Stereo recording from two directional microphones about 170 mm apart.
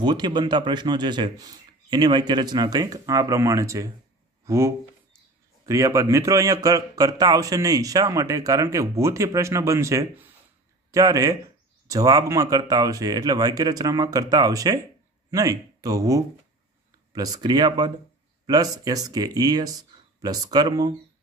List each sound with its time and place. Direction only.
0.0 s speech: 25° right (ahead or behind)